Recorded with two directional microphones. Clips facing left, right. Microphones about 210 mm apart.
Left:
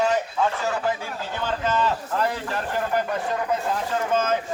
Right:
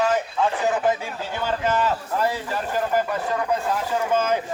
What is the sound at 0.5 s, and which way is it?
A man's voice, 15° right (ahead or behind).